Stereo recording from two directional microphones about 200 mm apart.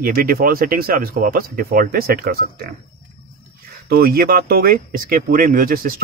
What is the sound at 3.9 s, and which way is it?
Speech, 50° right (ahead or behind).